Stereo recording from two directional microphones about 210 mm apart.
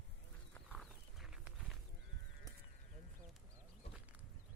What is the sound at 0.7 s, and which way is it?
Walk, 5° right (ahead or behind).